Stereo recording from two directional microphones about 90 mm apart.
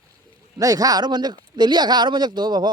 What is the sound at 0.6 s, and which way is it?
Speech, 45° right (ahead or behind).